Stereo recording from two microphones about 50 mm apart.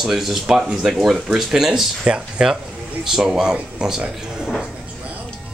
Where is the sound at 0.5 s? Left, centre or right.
Centre.